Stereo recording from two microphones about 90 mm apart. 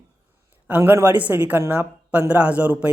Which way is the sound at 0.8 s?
25° right (ahead or behind).